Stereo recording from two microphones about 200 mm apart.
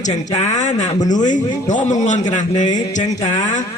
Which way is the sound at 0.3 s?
35° left (ahead or behind).